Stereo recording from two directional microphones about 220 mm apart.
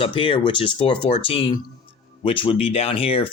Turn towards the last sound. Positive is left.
turn(degrees=25)  # may be behind; listen again after turning